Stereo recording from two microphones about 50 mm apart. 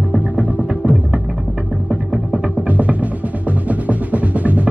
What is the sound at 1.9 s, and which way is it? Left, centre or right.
Music, centre.